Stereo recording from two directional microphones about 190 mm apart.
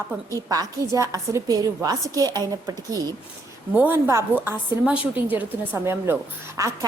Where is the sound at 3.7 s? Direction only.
10° right (ahead or behind).